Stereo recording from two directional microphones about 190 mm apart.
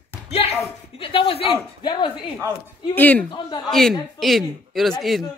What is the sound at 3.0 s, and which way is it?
Speech, 10° left (ahead or behind).